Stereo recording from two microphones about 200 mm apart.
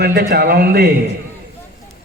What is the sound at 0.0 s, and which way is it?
Speech, 55° right (ahead or behind).